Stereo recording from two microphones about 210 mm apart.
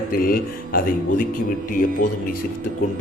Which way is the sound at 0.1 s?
45° left (ahead or behind).